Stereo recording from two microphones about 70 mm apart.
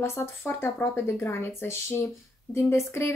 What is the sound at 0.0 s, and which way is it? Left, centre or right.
A woman's voice, left.